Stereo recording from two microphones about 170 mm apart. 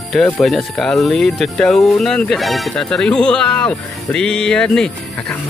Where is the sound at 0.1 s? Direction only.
Centre (ahead or behind).